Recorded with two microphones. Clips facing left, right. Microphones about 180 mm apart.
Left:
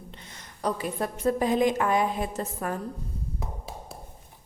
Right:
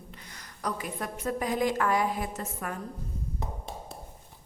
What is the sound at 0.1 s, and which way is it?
A woman's voice, 25° left (ahead or behind).